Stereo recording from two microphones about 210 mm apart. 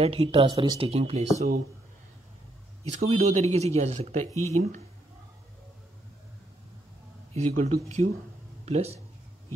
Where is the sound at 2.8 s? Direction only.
30° right (ahead or behind).